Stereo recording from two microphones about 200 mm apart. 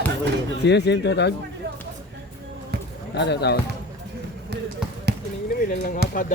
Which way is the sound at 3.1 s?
55° left (ahead or behind).